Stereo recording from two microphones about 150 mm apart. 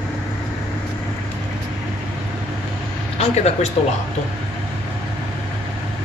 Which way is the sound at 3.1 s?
45° left (ahead or behind).